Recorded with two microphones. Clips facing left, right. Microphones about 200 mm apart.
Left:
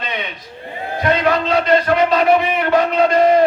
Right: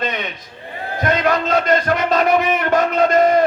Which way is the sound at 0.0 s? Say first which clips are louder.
Right 2 dB; 45° right (ahead or behind).